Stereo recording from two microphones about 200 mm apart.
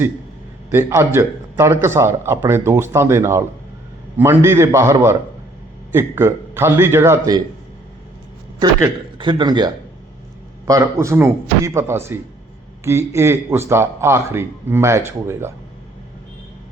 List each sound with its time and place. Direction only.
0.7 s a man's voice: 10° right (ahead or behind)
8.5 s a man's voice: 20° right (ahead or behind)